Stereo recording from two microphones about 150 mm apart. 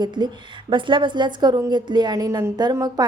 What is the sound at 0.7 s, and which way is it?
A woman's voice, 35° right (ahead or behind).